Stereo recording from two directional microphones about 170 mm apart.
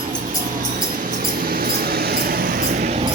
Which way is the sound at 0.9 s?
55° right (ahead or behind).